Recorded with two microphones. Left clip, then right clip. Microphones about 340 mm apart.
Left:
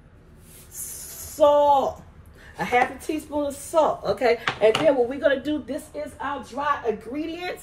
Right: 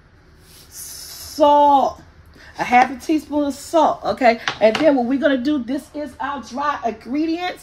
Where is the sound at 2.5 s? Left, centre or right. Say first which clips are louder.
Right 7 dB; right.